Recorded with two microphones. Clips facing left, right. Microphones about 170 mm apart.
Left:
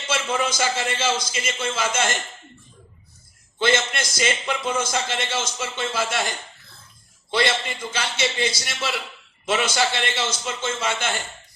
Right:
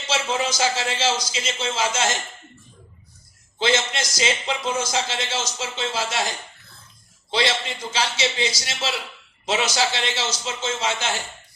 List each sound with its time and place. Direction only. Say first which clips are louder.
0.1 s a man's voice: even; 55° left (ahead or behind)
3.6 s speech: even; 55° left (ahead or behind)
7.3 s speech: left 1 dB; 55° left (ahead or behind)